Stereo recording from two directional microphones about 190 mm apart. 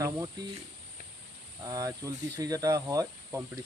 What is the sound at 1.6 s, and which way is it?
Speech, 20° right (ahead or behind).